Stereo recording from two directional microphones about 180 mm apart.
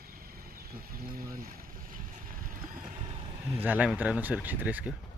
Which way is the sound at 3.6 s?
10° right (ahead or behind).